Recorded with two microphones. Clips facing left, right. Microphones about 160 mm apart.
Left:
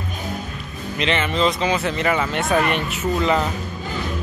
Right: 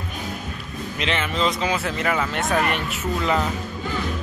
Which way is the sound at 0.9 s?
5° right (ahead or behind).